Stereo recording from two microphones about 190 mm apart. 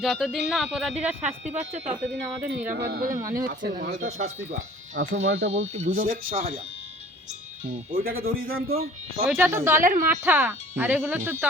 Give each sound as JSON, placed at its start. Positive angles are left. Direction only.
{"t": 0.0, "sound": "speech", "side_deg": 0}
{"t": 1.2, "sound": "speech", "side_deg": -40}
{"t": 2.6, "sound": "speech", "side_deg": -50}
{"t": 3.2, "sound": "speech", "side_deg": -15}
{"t": 3.4, "sound": "speech", "side_deg": -50}
{"t": 5.2, "sound": "speech", "side_deg": -75}
{"t": 5.5, "sound": "speech", "side_deg": -35}
{"t": 6.0, "sound": "speech", "side_deg": -45}
{"t": 6.3, "sound": "speech", "side_deg": -30}
{"t": 7.9, "sound": "speech", "side_deg": -50}
{"t": 9.2, "sound": "speech", "side_deg": -10}
{"t": 9.8, "sound": "speech", "side_deg": -45}
{"t": 10.1, "sound": "speech", "side_deg": -10}